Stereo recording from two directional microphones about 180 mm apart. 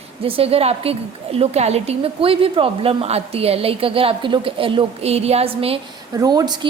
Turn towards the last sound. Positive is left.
turn(degrees=-20)  # may be behind; listen again after turning